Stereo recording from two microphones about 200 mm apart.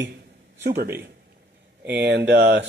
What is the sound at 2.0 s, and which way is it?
Speech, 55° right (ahead or behind).